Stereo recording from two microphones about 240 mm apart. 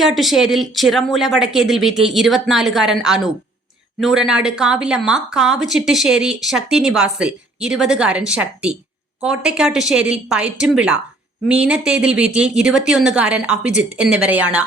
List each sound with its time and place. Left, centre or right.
0.0 s speech: centre